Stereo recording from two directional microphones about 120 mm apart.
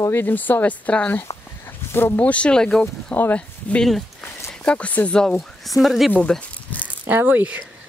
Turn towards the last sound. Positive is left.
turn(degrees=-15)  # may be behind; listen again after turning